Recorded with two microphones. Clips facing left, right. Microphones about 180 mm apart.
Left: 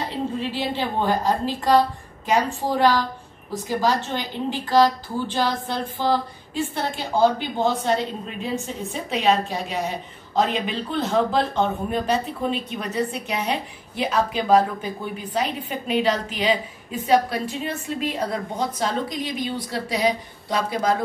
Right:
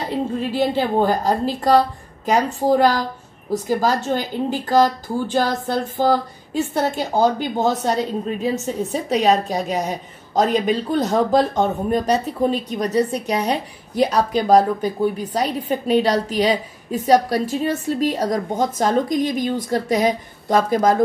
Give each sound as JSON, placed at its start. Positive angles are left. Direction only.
{"t": 0.4, "sound": "a woman's voice", "side_deg": -45}